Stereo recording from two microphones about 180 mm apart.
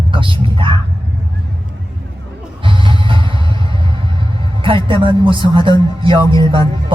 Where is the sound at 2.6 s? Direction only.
30° right (ahead or behind).